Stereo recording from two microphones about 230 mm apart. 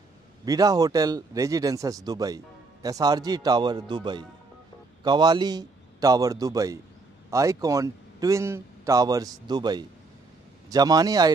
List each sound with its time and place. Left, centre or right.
0.5 s speech: centre